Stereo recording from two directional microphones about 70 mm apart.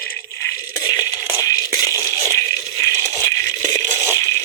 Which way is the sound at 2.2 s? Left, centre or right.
Left.